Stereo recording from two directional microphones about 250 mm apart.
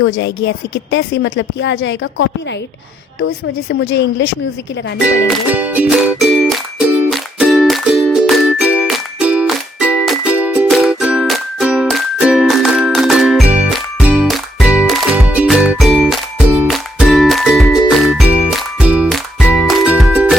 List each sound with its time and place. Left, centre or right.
0.0 s a woman's voice: left
3.7 s a woman's voice: left
5.0 s music: centre